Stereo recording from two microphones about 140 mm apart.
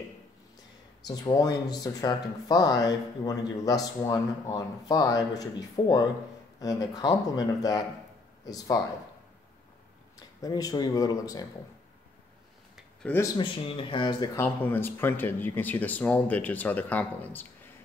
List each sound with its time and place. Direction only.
1.0 s speech: 25° left (ahead or behind)
10.1 s speech: 25° left (ahead or behind)
13.1 s speech: 10° left (ahead or behind)
13.4 s speech: 40° left (ahead or behind)
14.3 s speech: 15° left (ahead or behind)